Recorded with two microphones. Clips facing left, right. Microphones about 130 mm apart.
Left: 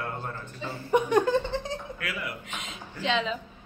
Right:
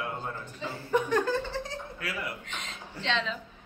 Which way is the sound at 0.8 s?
15° left (ahead or behind).